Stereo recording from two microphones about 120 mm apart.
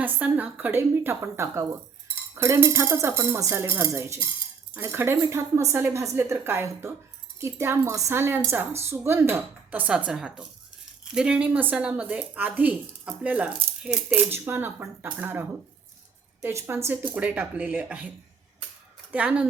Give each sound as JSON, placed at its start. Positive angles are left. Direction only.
{"t": 0.0, "sound": "a woman's voice", "side_deg": -15}
{"t": 19.1, "sound": "speech", "side_deg": -10}